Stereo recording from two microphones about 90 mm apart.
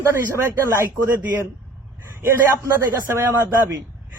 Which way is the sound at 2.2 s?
25° right (ahead or behind).